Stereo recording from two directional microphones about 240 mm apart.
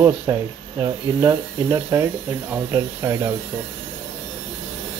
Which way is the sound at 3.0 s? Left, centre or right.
Centre.